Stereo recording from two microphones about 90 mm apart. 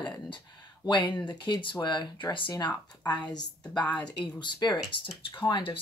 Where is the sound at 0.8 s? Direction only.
55° left (ahead or behind).